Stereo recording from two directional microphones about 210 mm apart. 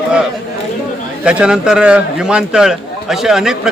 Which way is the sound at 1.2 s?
5° right (ahead or behind).